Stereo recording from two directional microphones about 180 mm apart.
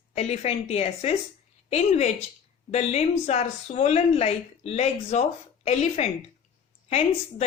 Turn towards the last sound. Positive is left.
turn(degrees=35)  # may be behind; listen again after turning